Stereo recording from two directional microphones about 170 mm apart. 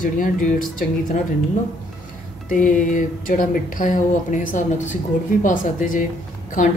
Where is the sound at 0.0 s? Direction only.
50° left (ahead or behind).